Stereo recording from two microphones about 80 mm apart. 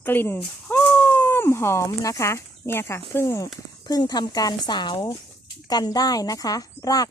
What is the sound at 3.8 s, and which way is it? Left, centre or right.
Speech, left.